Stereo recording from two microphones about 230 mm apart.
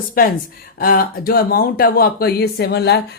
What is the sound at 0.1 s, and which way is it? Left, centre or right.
Speech, left.